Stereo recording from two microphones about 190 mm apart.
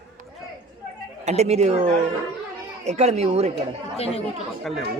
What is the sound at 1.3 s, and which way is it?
Speech, 35° right (ahead or behind).